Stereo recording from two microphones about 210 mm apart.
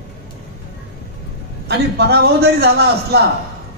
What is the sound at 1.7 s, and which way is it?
A man's voice, 50° right (ahead or behind).